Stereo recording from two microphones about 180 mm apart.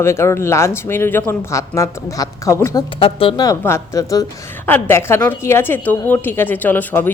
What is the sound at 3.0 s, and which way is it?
Speech, 30° left (ahead or behind).